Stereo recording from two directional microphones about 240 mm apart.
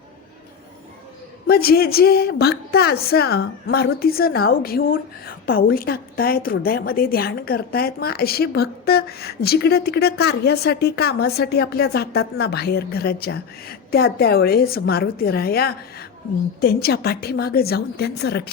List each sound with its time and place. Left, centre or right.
1.5 s a woman's voice: left